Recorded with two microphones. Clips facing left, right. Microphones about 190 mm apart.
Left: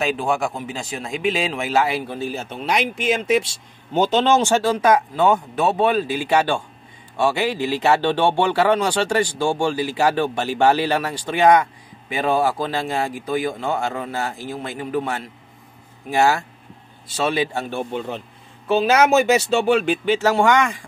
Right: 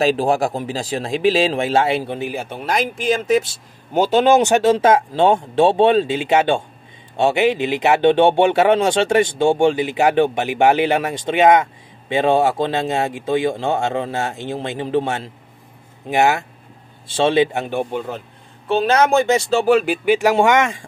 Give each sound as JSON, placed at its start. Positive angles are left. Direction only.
{"t": 0.0, "sound": "speech", "side_deg": -35}
{"t": 2.7, "sound": "speech", "side_deg": 0}
{"t": 18.7, "sound": "speech", "side_deg": 5}